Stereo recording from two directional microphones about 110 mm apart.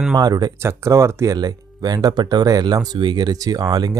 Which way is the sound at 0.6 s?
25° right (ahead or behind).